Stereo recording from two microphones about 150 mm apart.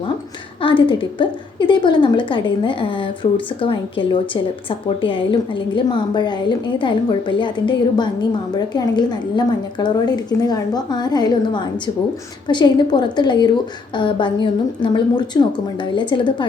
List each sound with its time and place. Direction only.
0.6 s a woman's voice: 35° left (ahead or behind)